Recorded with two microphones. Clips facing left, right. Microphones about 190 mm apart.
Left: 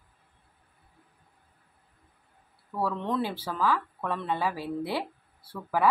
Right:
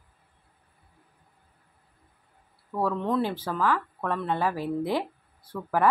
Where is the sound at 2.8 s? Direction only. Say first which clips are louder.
Right 3 dB; 15° right (ahead or behind).